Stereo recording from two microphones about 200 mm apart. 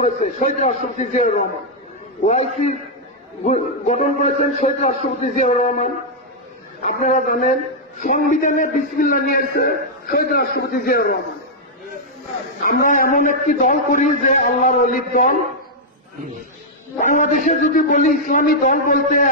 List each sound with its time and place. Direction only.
0.0 s a man's voice: 40° left (ahead or behind)
12.7 s a man's voice: 45° left (ahead or behind)
17.0 s a man's voice: 40° left (ahead or behind)